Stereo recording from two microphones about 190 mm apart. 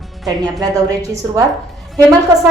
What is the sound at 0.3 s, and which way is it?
A woman's voice, 20° right (ahead or behind).